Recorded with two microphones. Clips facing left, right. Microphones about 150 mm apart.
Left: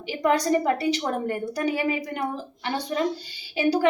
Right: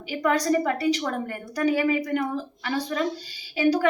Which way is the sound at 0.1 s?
30° left (ahead or behind).